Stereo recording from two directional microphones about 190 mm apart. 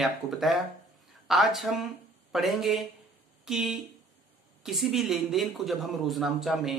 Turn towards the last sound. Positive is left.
turn(degrees=0)  # may be behind; listen again after turning